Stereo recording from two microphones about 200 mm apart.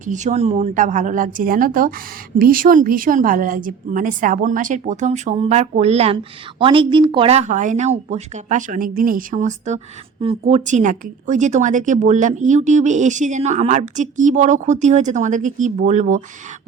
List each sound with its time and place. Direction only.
0.0 s speech: 40° right (ahead or behind)